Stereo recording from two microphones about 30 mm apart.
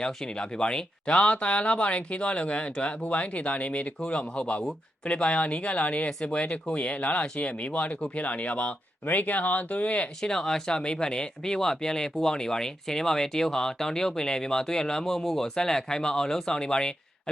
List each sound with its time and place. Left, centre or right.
0.3 s speech: left
1.1 s speech: left
3.0 s speech: left
9.0 s speech: left
10.3 s speech: centre
15.5 s speech: left